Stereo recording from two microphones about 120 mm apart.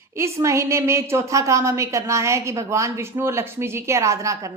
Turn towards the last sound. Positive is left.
turn(degrees=-25)  # may be behind; listen again after turning